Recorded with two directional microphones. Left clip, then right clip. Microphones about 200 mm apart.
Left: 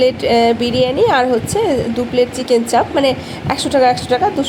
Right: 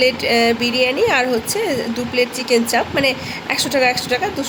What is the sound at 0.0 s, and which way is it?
Speech, 15° left (ahead or behind).